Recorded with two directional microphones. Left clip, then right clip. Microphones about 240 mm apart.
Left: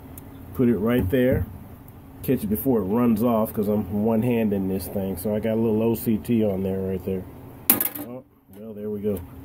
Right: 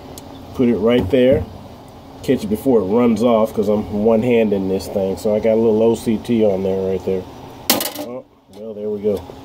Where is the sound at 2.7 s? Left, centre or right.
Left.